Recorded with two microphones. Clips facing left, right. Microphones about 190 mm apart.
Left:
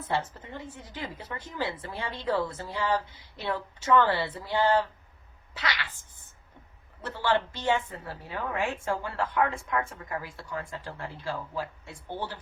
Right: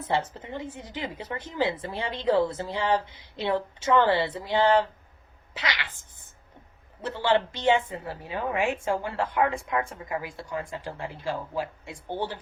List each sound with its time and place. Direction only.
0.1 s a woman's voice: 20° right (ahead or behind)
7.0 s a woman's voice: 20° right (ahead or behind)